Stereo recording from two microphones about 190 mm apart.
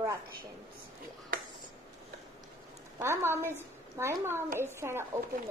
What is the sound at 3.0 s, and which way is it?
A woman's voice, 15° right (ahead or behind).